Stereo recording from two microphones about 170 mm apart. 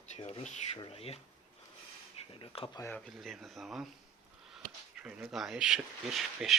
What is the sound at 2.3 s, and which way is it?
Speech, 30° left (ahead or behind).